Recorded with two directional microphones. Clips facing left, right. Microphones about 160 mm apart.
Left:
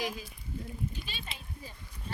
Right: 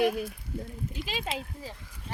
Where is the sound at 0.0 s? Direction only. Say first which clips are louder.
Right 10 dB; 65° right (ahead or behind).